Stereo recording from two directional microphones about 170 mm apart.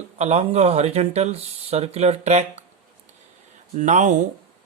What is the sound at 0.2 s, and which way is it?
Speech, 40° right (ahead or behind).